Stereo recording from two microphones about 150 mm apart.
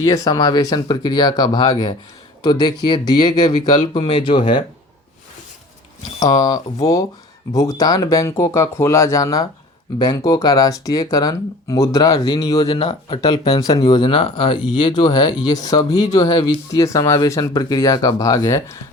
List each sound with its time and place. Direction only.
0.0 s speech: 20° left (ahead or behind)
3.9 s speech: 40° left (ahead or behind)
6.1 s speech: 25° left (ahead or behind)